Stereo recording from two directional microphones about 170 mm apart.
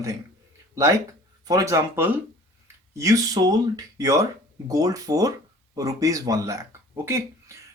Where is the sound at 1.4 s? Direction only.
20° right (ahead or behind).